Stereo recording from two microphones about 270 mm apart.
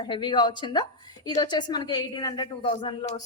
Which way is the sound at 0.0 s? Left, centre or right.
Centre.